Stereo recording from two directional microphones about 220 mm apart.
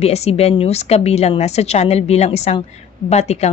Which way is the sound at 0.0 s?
30° left (ahead or behind).